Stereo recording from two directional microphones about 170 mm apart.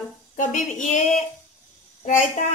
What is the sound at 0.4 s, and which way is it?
Speech, 50° left (ahead or behind).